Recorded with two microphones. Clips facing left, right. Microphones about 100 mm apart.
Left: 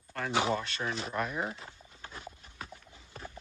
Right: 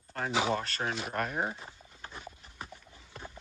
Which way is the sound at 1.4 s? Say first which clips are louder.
Right 2 dB; 25° right (ahead or behind).